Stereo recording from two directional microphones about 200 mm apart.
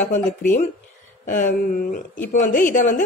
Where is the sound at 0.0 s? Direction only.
40° left (ahead or behind).